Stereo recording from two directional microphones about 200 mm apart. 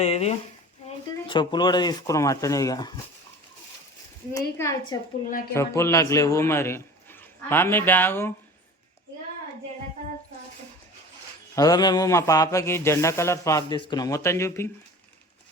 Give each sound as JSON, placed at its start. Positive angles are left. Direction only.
{"t": 0.0, "sound": "speech", "side_deg": 30}
{"t": 4.5, "sound": "a man's voice", "side_deg": 15}
{"t": 11.5, "sound": "a man's voice", "side_deg": 20}